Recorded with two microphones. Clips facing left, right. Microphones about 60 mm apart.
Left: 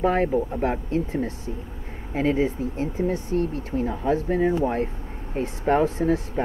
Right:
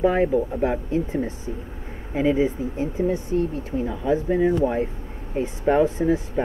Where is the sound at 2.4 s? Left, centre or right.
Centre.